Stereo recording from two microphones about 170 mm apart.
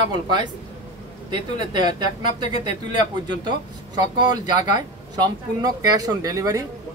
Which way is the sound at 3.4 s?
25° right (ahead or behind).